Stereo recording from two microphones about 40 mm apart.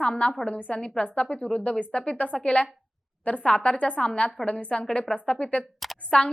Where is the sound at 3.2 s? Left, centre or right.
Left.